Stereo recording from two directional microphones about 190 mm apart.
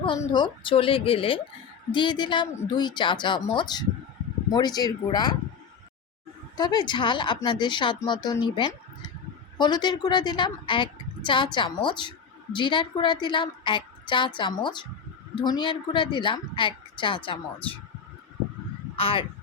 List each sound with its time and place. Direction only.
0.2 s speech: 25° left (ahead or behind)
6.6 s speech: 20° left (ahead or behind)
18.9 s speech: 30° left (ahead or behind)